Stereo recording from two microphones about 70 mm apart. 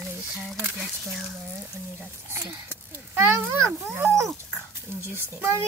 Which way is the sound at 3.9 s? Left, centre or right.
Right.